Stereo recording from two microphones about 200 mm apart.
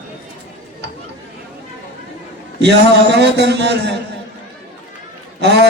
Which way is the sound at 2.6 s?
60° right (ahead or behind).